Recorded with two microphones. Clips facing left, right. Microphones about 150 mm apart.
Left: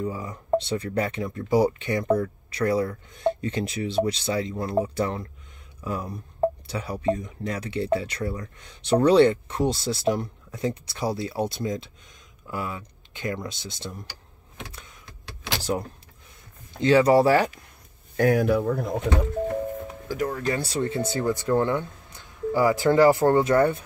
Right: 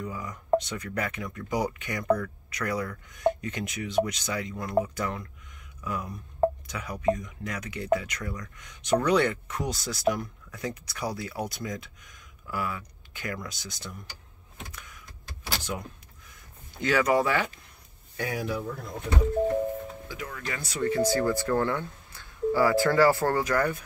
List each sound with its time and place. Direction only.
0.0 s speech: 30° left (ahead or behind)
14.7 s power windows: 25° left (ahead or behind)
15.0 s power windows: 80° left
16.8 s speech: 30° left (ahead or behind)
18.1 s speech: 50° left (ahead or behind); by 19.1 s 80° left
20.1 s speech: 40° left (ahead or behind); by 23.8 s 25° left (ahead or behind)